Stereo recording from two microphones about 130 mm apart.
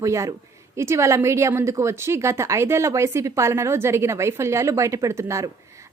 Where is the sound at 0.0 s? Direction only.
25° right (ahead or behind).